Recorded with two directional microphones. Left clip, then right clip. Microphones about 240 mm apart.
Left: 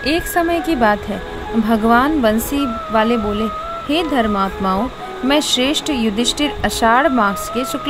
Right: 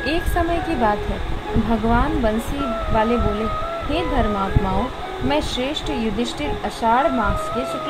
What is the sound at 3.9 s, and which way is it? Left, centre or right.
Speech, left.